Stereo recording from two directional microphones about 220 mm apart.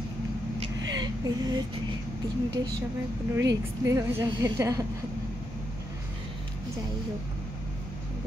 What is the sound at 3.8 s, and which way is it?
A woman's voice, 15° right (ahead or behind).